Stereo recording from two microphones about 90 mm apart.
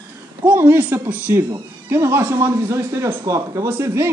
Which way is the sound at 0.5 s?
20° right (ahead or behind).